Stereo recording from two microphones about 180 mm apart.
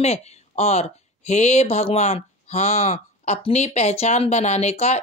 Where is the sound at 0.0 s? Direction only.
35° left (ahead or behind).